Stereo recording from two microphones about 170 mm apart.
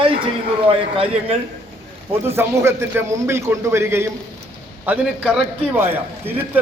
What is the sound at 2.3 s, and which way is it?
A man's voice, 15° right (ahead or behind).